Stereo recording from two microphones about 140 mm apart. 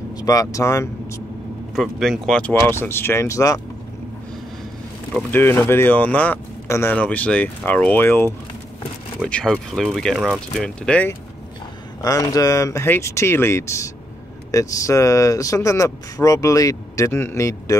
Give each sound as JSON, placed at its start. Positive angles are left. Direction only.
{"t": 0.1, "sound": "speech", "side_deg": 25}
{"t": 1.8, "sound": "speech", "side_deg": 0}
{"t": 2.7, "sound": "speech", "side_deg": 15}
{"t": 5.3, "sound": "speech", "side_deg": 15}
{"t": 9.2, "sound": "speech", "side_deg": 5}
{"t": 10.9, "sound": "speech", "side_deg": 10}
{"t": 12.0, "sound": "speech", "side_deg": 25}